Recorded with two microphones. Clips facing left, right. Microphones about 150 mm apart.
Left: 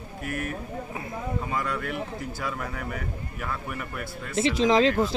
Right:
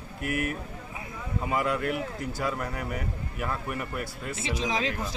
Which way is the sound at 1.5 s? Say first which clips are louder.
Right 7 dB; 5° right (ahead or behind).